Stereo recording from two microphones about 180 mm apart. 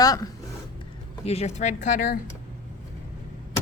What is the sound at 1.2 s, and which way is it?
Speech, 35° left (ahead or behind).